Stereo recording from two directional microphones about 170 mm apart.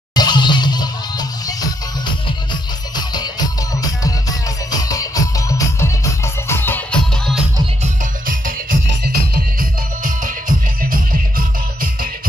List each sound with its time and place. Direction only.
0.1 s music: 25° left (ahead or behind); by 7.3 s 10° left (ahead or behind)
7.8 s music: 55° right (ahead or behind)